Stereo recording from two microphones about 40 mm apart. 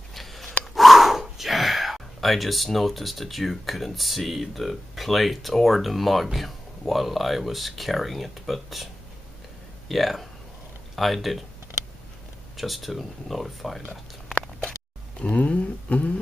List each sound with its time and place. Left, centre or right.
0.1 s a sound: centre
0.7 s speech: centre
9.8 s speech: centre
12.5 s speech: centre
15.1 s speech: left